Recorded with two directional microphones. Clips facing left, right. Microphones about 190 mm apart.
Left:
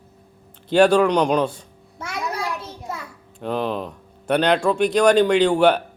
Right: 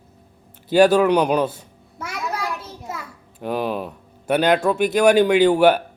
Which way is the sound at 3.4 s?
10° right (ahead or behind).